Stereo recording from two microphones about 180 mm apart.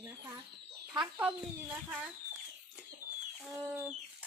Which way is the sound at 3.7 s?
10° right (ahead or behind).